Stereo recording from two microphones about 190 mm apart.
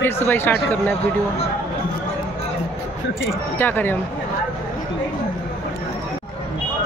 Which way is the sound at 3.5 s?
10° left (ahead or behind).